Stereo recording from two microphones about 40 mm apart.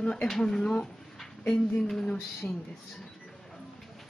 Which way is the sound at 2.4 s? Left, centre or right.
Centre.